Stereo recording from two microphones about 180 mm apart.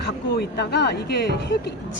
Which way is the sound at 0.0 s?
65° left (ahead or behind).